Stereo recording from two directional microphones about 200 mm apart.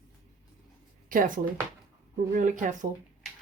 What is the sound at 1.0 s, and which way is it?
Speech, 40° right (ahead or behind).